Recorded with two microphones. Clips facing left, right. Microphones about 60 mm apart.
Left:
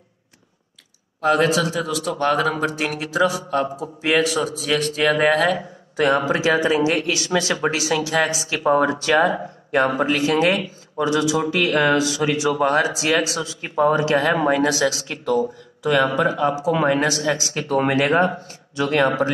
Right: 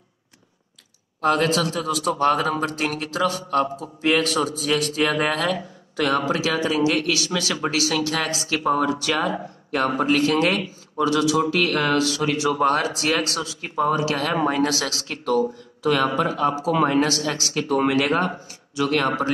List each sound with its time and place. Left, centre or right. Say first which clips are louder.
1.2 s a man's voice: left 2 dB; centre
5.9 s speech: left 3 dB; left
7.7 s a man's voice: left 2 dB; left
8.5 s a man's voice: left 3 dB; left
10.1 s speech: left 1 dB; centre
13.4 s speech: left 1 dB; left
13.7 s speech: left 4 dB; left
14.6 s speech: left 4 dB; centre
16.7 s a man's voice: right 1 dB; left
17.0 s speech: left 2 dB; centre
17.6 s speech: right 1 dB; left